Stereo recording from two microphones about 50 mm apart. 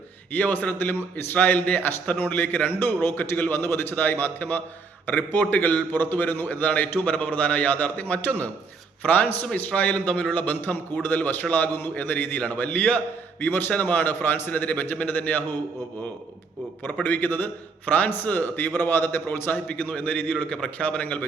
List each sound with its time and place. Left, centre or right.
0.3 s a man's voice: left
13.4 s a man's voice: left
16.8 s a man's voice: left
19.9 s a man's voice: left